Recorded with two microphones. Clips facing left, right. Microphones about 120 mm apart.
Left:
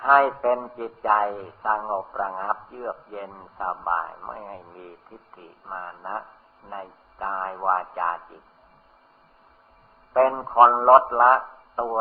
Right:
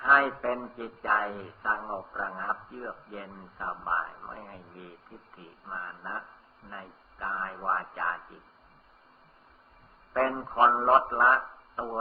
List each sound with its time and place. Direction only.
0.0 s a man's voice: 45° left (ahead or behind)
10.1 s a man's voice: 50° left (ahead or behind)